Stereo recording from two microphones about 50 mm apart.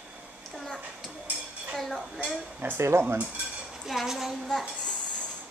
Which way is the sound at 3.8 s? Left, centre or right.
Centre.